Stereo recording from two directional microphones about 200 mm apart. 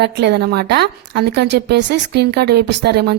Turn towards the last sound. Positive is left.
turn(degrees=-55)  # may be behind; listen again after turning